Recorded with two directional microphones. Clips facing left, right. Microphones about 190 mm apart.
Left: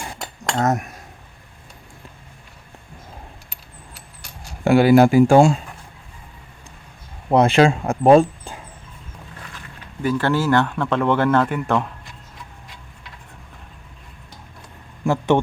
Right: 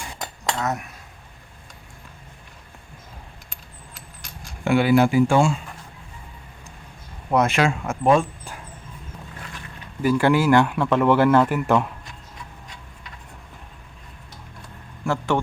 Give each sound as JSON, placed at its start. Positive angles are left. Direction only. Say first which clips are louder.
{"t": 0.5, "sound": "speech", "louder": "left 7 dB", "side_deg": 45}
{"t": 4.6, "sound": "speech", "louder": "left 5 dB", "side_deg": 40}
{"t": 7.3, "sound": "speech", "louder": "left 5 dB", "side_deg": 30}
{"t": 10.0, "sound": "speech", "louder": "right 2 dB", "side_deg": -10}
{"t": 15.0, "sound": "speech", "louder": "left 5 dB", "side_deg": 15}